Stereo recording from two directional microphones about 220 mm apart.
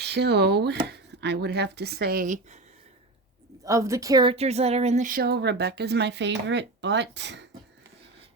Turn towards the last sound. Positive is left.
turn(degrees=-50)  # may be behind; listen again after turning